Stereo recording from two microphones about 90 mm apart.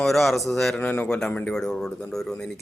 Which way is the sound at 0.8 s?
20° left (ahead or behind).